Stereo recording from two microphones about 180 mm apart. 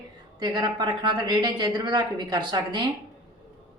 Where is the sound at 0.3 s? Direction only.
25° right (ahead or behind).